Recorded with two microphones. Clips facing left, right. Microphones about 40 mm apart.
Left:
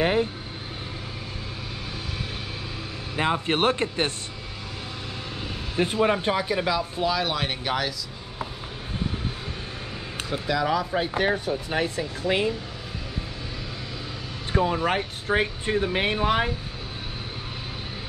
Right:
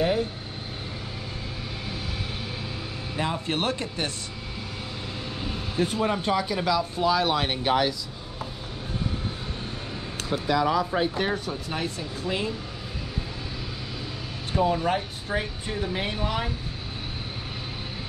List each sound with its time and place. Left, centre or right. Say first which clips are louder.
0.0 s vehicle: left 2 dB; left
3.2 s speech: left 4 dB; left
6.0 s speech: left 2 dB; left
7.1 s speech: right 4 dB; centre
10.4 s speech: right 1 dB; centre
11.1 s speech: left 3 dB; centre
11.7 s speech: left 3 dB; left
14.5 s speech: even; centre
14.9 s speech: left 2 dB; left